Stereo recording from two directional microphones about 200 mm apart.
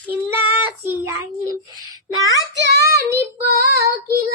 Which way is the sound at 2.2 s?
65° right (ahead or behind).